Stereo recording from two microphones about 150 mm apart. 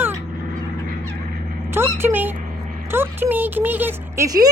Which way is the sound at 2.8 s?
15° right (ahead or behind).